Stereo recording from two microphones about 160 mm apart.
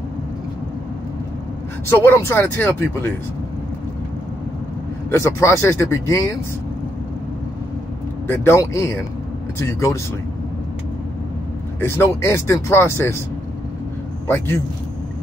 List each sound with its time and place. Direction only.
1.9 s speech: 15° left (ahead or behind)
5.1 s speech: 15° left (ahead or behind)
8.3 s speech: 15° left (ahead or behind)
11.8 s speech: 15° left (ahead or behind)
14.2 s speech: 15° left (ahead or behind)